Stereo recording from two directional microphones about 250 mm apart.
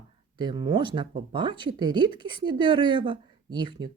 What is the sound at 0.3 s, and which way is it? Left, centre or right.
A woman's voice, centre.